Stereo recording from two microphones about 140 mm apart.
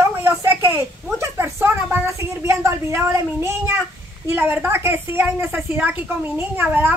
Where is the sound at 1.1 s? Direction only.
15° right (ahead or behind).